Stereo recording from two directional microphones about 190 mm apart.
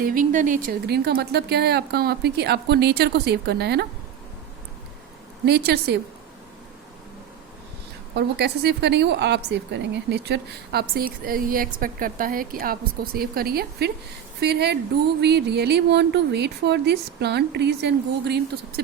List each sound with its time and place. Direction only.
0.0 s a woman's voice: 45° right (ahead or behind)
5.5 s a woman's voice: 60° right (ahead or behind)
8.1 s a woman's voice: 60° right (ahead or behind)